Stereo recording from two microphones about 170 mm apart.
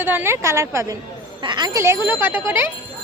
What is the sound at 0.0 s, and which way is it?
A woman's voice, 10° right (ahead or behind).